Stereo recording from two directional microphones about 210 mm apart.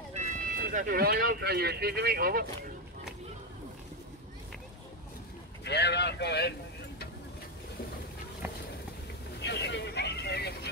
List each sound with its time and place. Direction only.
0.1 s speech: 35° right (ahead or behind)
5.6 s speech: 55° left (ahead or behind)
9.4 s vehicle: 55° left (ahead or behind)